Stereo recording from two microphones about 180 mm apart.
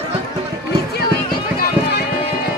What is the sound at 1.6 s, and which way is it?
Music, 65° left (ahead or behind).